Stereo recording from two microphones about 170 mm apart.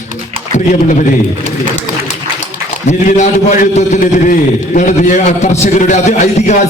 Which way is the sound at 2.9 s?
45° left (ahead or behind).